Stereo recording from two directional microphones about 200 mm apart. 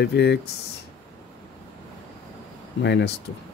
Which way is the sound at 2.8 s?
60° left (ahead or behind).